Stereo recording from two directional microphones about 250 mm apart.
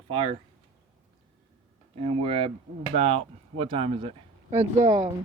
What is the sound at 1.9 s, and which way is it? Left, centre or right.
Speech, right.